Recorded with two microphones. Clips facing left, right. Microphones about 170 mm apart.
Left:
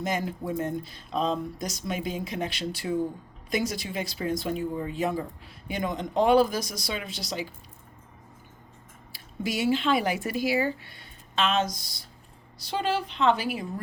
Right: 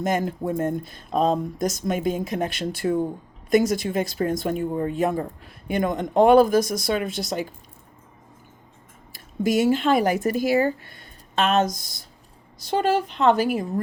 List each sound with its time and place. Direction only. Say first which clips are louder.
0.0 s speech: right 6 dB; 50° right (ahead or behind)
9.1 s speech: right 9 dB; 45° right (ahead or behind)